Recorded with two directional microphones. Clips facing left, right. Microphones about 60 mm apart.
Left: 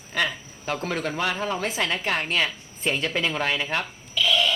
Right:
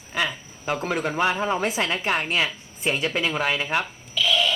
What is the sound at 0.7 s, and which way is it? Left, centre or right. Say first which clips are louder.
Speech: right 3 dB; centre.